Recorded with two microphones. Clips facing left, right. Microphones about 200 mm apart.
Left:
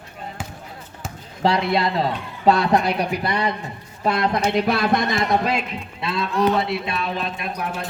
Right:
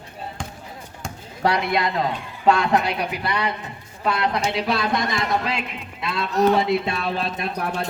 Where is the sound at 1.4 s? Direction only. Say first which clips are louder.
Left 2 dB; 25° left (ahead or behind).